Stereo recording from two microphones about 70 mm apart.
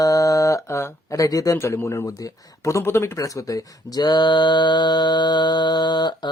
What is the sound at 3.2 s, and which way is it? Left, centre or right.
Speech, left.